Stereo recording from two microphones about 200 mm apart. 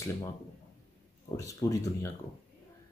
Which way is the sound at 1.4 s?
15° left (ahead or behind).